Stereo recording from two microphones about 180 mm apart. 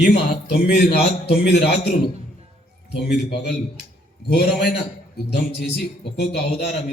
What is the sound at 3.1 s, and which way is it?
A man's voice, 65° left (ahead or behind).